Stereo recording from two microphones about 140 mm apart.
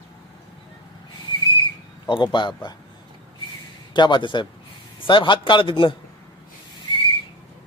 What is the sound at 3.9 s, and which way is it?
A man's voice, 35° left (ahead or behind).